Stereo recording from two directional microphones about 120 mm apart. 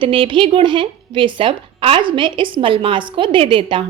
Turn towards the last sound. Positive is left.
turn(degrees=-45)  # may be behind; listen again after turning